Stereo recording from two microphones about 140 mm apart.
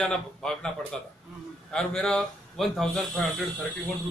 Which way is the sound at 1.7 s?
5° left (ahead or behind).